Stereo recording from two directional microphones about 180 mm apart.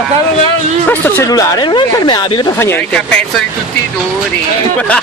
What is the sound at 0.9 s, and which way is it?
Speech, 10° left (ahead or behind).